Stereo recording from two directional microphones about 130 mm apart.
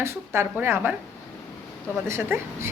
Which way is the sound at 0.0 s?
20° right (ahead or behind).